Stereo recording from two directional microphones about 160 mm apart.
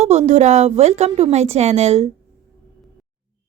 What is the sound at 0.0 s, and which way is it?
A woman's voice, 45° right (ahead or behind).